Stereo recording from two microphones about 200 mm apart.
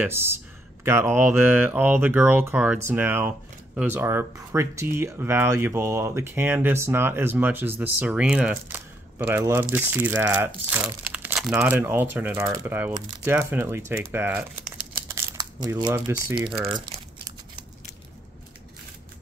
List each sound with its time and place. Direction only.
0.0 s speech: 10° right (ahead or behind)
16.4 s speech: 25° right (ahead or behind)